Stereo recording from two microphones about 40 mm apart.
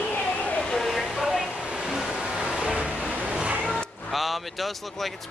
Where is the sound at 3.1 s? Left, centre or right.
Right.